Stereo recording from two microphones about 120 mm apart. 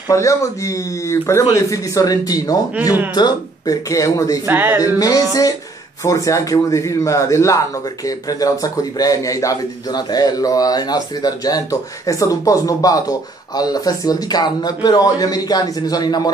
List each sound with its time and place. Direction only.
0.1 s speech: 25° left (ahead or behind)
4.5 s speech: 15° right (ahead or behind)
4.7 s speech: 30° left (ahead or behind)